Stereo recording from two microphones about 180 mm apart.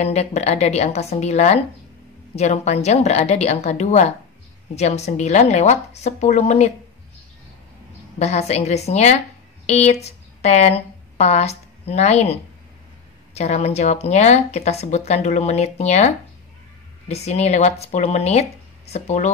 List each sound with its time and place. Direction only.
0.0 s speech: 35° left (ahead or behind)
8.2 s speech: 35° left (ahead or behind)
17.1 s speech: 35° left (ahead or behind)